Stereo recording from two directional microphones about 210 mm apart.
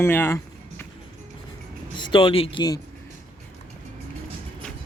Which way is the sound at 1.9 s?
20° left (ahead or behind).